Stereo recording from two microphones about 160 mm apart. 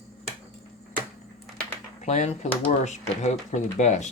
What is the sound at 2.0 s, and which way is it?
Speech, 45° left (ahead or behind).